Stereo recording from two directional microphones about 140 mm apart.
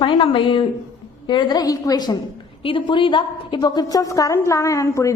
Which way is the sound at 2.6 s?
35° left (ahead or behind).